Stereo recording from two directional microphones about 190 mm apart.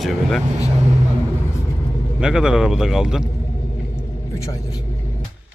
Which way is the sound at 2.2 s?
5° right (ahead or behind).